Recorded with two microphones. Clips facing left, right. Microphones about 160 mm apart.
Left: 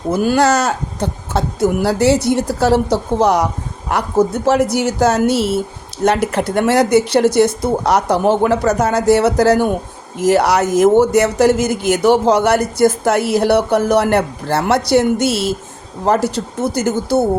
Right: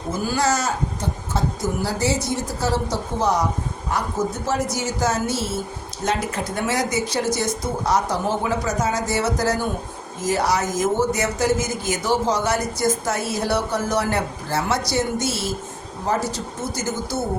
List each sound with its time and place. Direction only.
0.1 s speech: 70° left (ahead or behind)